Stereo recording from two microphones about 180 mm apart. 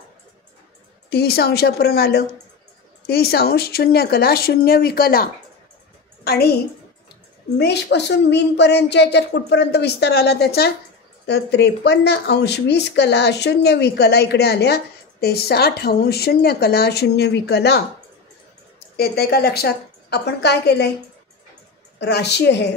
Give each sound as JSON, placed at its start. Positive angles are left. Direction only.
{"t": 1.1, "sound": "a woman's voice", "side_deg": 60}
{"t": 18.9, "sound": "speech", "side_deg": 60}
{"t": 21.9, "sound": "speech", "side_deg": 70}